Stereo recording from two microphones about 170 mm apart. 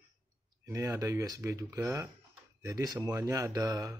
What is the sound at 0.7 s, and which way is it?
Speech, 15° right (ahead or behind).